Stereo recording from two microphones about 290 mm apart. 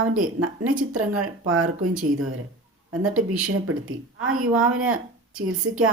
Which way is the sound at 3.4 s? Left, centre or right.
Right.